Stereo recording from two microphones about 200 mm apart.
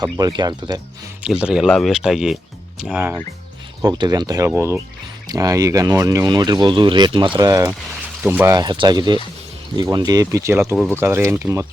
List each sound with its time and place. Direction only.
0.0 s speech: 20° right (ahead or behind)
1.2 s speech: 5° right (ahead or behind)